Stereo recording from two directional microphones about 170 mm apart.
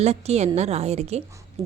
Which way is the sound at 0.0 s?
40° right (ahead or behind).